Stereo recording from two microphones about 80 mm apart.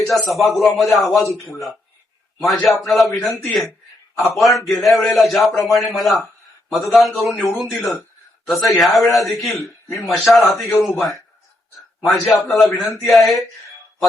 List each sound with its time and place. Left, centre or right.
0.1 s a man's voice: centre
9.6 s a man's voice: left
10.1 s a man's voice: centre